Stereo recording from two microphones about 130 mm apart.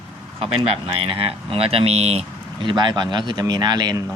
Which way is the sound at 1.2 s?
50° right (ahead or behind).